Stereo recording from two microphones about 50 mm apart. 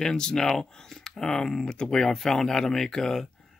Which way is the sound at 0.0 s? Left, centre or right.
Centre.